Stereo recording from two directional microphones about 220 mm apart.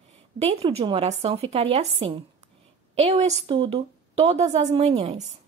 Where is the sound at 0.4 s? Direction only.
25° right (ahead or behind).